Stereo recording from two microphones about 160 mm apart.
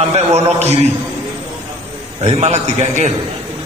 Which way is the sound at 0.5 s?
45° right (ahead or behind).